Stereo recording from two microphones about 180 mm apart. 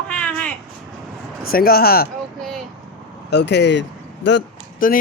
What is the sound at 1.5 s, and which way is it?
Speech, 55° left (ahead or behind).